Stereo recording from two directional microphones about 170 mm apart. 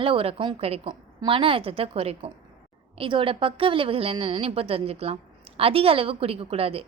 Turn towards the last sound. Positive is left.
turn(degrees=-35)  # may be behind; listen again after turning